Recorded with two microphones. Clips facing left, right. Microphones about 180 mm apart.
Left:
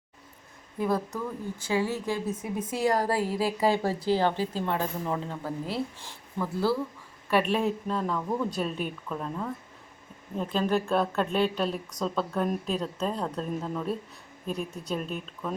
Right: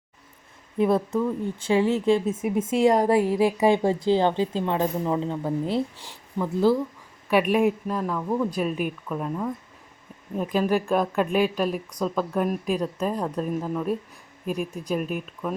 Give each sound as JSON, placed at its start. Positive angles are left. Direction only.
{"t": 0.8, "sound": "a woman's voice", "side_deg": -25}